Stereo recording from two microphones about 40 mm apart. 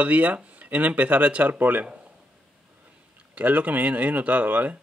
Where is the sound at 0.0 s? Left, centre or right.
Right.